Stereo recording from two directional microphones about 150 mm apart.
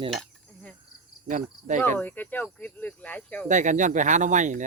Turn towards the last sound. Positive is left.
turn(degrees=-55)  # may be behind; listen again after turning